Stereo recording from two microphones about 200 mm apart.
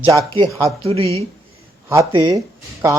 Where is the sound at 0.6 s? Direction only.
30° right (ahead or behind).